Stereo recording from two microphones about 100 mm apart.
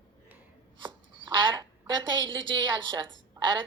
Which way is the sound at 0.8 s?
50° right (ahead or behind).